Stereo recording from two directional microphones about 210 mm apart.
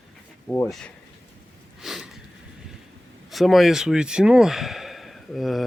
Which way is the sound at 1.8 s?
Centre (ahead or behind).